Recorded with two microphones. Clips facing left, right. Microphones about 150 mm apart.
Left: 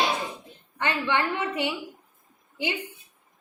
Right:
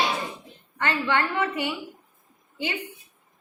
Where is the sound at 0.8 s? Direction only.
15° left (ahead or behind).